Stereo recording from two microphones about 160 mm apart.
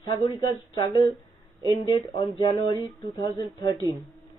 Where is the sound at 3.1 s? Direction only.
30° left (ahead or behind).